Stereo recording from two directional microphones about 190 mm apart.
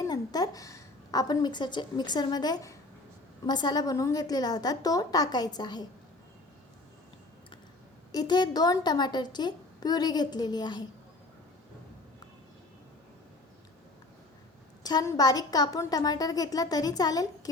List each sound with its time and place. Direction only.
0.0 s a woman's voice: 20° left (ahead or behind)
8.1 s a woman's voice: 20° left (ahead or behind)
14.8 s a woman's voice: 20° left (ahead or behind)